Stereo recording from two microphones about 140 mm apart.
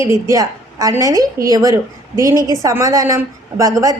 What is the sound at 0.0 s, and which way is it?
A woman's voice, 20° right (ahead or behind).